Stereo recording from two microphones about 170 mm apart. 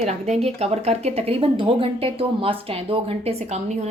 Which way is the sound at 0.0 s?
40° right (ahead or behind).